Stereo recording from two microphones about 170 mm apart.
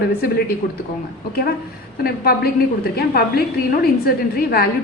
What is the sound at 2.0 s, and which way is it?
A woman's voice, 65° left (ahead or behind).